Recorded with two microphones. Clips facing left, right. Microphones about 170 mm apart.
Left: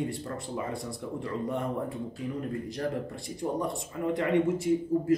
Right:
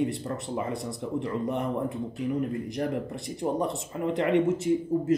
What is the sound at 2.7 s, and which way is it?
Speech, 20° right (ahead or behind).